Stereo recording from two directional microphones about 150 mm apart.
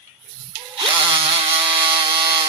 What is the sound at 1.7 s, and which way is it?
Chainsaw, 35° right (ahead or behind).